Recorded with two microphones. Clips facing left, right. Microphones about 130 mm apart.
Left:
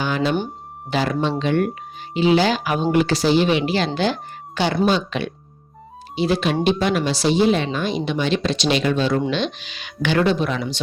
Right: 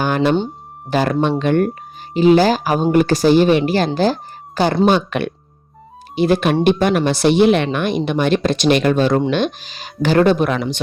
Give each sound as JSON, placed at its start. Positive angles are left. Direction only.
{"t": 0.0, "sound": "music", "side_deg": -55}
{"t": 0.9, "sound": "speech", "side_deg": -50}
{"t": 4.9, "sound": "speech", "side_deg": -55}